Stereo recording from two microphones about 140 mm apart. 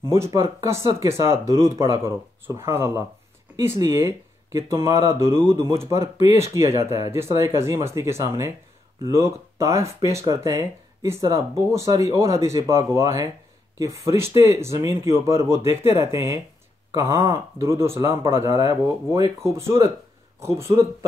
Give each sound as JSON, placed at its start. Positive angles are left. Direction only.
{"t": 0.0, "sound": "speech", "side_deg": -20}